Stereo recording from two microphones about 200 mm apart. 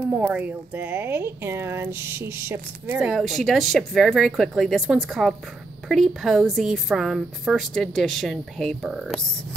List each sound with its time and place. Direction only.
0.0 s speech: 5° right (ahead or behind)
3.0 s a woman's voice: centre (ahead or behind)